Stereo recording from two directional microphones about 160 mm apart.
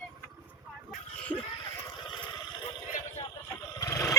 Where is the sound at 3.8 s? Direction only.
20° left (ahead or behind).